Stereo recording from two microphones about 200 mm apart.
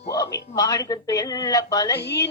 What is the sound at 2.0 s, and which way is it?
Speech, 55° left (ahead or behind).